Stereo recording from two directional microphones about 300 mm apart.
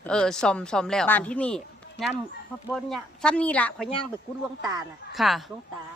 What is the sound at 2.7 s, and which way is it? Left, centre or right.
Speech, centre.